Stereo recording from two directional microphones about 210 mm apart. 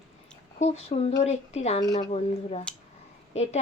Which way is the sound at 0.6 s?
30° left (ahead or behind).